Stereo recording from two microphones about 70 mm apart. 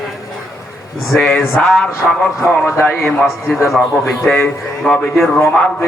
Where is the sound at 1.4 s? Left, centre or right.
Left.